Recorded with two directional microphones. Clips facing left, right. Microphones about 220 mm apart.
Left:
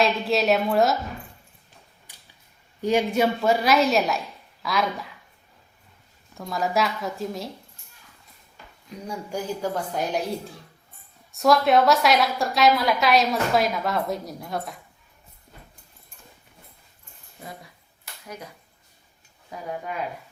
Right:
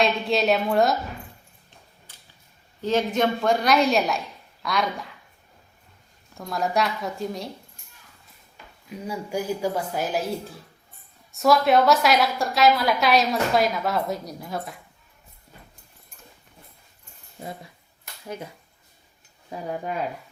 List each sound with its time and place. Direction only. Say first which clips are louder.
0.0 s a woman's voice: even; centre (ahead or behind)
2.1 s whip: even; 15° left (ahead or behind)
2.8 s a woman's voice: left 1 dB; 10° left (ahead or behind)
6.3 s a woman's voice: even; centre (ahead or behind)
8.9 s a woman's voice: right 2 dB; 10° right (ahead or behind)
19.5 s speech: right 3 dB; 35° right (ahead or behind)